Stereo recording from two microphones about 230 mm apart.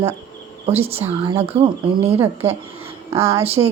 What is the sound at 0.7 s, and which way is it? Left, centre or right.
Speech, right.